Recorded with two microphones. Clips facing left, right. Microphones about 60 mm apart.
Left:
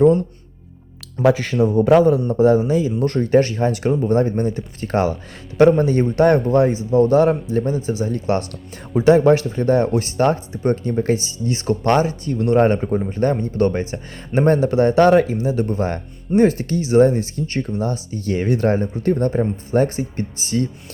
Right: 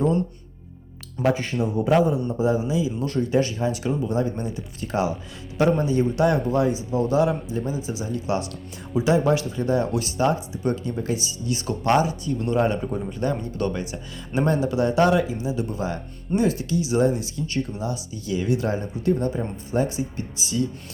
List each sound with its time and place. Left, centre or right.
1.2 s a man's voice: left